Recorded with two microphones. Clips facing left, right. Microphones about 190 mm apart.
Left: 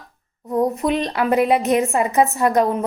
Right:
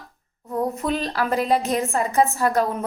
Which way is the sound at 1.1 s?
15° left (ahead or behind).